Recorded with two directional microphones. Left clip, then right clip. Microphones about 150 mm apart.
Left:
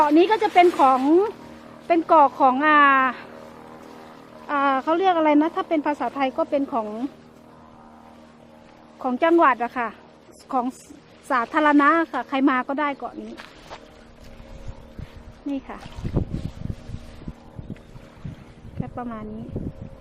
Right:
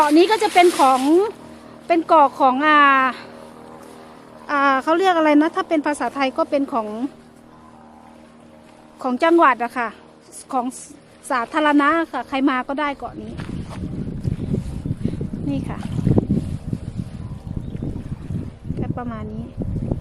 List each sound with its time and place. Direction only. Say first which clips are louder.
0.0 s speech: right 2 dB; 10° right (ahead or behind)
0.8 s a woman's voice: right 2 dB; centre (ahead or behind)
9.0 s a woman's voice: right 3 dB; 5° right (ahead or behind)
10.5 s speech: right 1 dB; 15° left (ahead or behind)
15.4 s a woman's voice: right 3 dB; 5° right (ahead or behind)
17.0 s boat: right 10 dB; 25° left (ahead or behind)
18.8 s a sound: right 3 dB; centre (ahead or behind)